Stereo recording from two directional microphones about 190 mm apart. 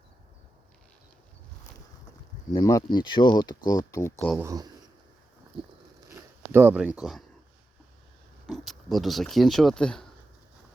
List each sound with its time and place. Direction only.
2.5 s speech: 20° left (ahead or behind)
4.4 s speech: 20° right (ahead or behind)
5.5 s a sound: 30° right (ahead or behind)
6.5 s speech: 10° right (ahead or behind)
8.4 s speech: centre (ahead or behind)